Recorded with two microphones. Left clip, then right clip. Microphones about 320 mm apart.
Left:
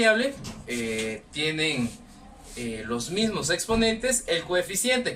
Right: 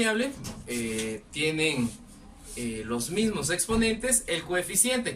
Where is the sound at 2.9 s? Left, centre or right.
Centre.